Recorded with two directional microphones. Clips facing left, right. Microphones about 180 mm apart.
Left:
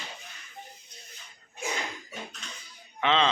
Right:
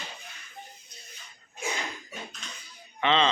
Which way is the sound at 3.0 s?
5° left (ahead or behind).